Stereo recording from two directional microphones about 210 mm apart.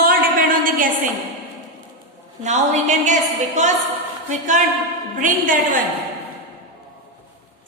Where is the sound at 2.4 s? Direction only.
35° right (ahead or behind).